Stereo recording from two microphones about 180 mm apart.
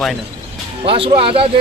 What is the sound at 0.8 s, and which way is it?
Speech, 30° right (ahead or behind).